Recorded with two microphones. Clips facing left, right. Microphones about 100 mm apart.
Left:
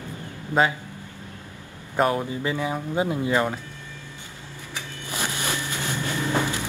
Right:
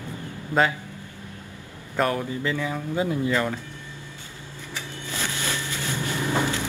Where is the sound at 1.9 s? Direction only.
20° left (ahead or behind).